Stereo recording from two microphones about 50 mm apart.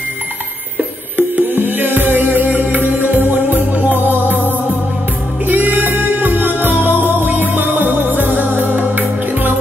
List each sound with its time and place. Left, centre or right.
1.1 s music: right
5.5 s music: right